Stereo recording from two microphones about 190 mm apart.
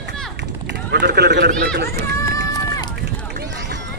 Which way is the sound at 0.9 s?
60° right (ahead or behind).